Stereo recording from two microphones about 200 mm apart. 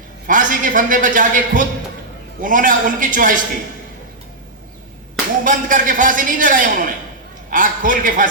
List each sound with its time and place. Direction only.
0.3 s a man's voice: 40° right (ahead or behind)
5.5 s a man's voice: 40° right (ahead or behind)